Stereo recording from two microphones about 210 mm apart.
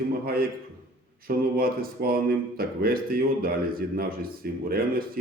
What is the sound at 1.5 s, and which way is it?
Speech, 45° right (ahead or behind).